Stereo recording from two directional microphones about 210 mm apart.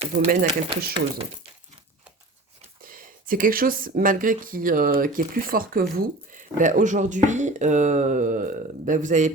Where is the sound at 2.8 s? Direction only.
40° right (ahead or behind).